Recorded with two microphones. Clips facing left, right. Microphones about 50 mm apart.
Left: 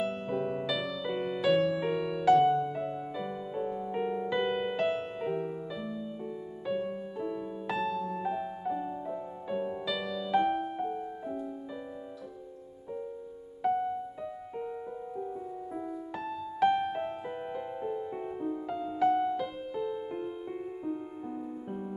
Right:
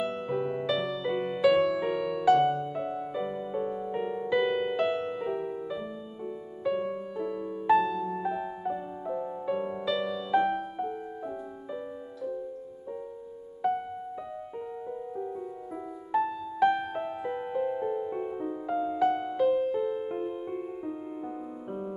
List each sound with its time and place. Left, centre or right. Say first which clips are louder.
0.0 s music: right 2 dB; centre
16.1 s music: right 8 dB; centre
16.6 s music: right 1 dB; centre
19.4 s music: right 9 dB; right